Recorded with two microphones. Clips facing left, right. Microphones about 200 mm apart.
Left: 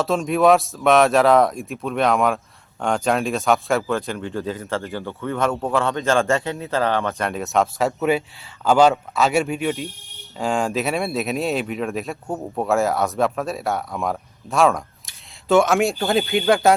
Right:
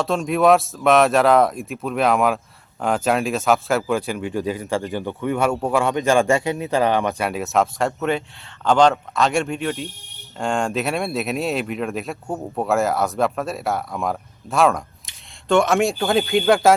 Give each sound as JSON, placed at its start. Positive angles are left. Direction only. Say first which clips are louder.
{"t": 0.0, "sound": "speech", "louder": "even", "side_deg": 0}